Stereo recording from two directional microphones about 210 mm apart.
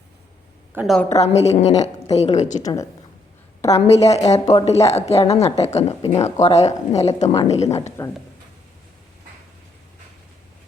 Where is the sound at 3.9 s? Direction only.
30° left (ahead or behind).